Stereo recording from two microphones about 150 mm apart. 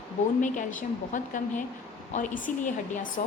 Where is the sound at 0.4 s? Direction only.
55° left (ahead or behind).